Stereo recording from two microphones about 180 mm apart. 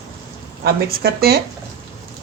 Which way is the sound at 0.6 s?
60° right (ahead or behind).